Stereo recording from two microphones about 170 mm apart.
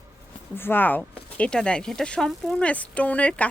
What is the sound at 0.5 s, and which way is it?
Speech, 10° left (ahead or behind).